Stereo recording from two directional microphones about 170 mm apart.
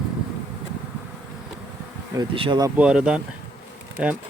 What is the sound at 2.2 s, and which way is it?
Bee, 30° right (ahead or behind).